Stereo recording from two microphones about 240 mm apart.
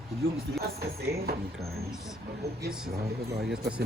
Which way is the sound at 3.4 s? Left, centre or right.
Right.